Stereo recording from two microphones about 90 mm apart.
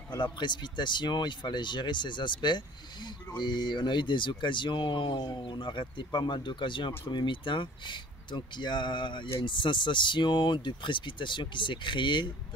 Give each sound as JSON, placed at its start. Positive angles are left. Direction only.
{"t": 0.1, "sound": "speech", "side_deg": 60}